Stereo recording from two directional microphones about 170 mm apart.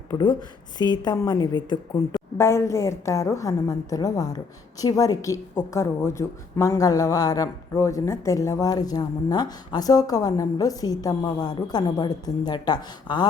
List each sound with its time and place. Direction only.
0.1 s a woman's voice: 25° left (ahead or behind)
2.4 s a woman's voice: 15° left (ahead or behind)